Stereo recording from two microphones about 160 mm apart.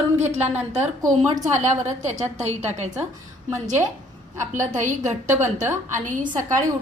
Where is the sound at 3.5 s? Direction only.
15° right (ahead or behind).